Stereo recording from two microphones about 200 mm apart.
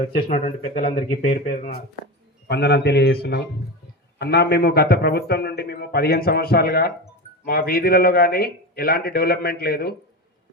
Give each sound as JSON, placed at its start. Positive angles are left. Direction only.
{"t": 0.3, "sound": "speech", "side_deg": 30}
{"t": 1.2, "sound": "a man's voice", "side_deg": 45}